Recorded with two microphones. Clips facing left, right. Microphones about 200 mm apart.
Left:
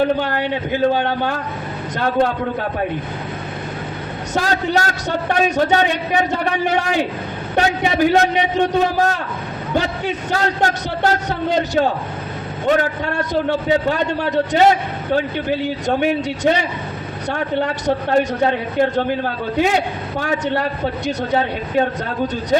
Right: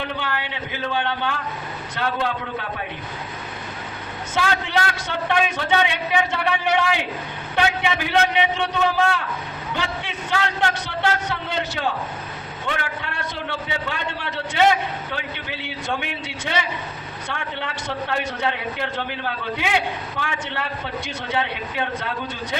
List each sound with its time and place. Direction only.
0.0 s a man's voice: 45° left (ahead or behind)
4.4 s a man's voice: 40° left (ahead or behind)